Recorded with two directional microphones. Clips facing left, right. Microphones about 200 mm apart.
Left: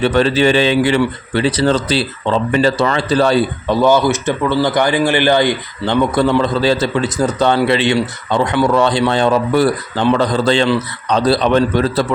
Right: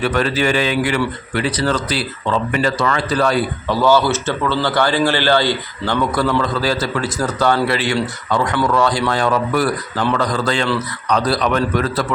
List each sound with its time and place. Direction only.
0.0 s speech: 25° left (ahead or behind)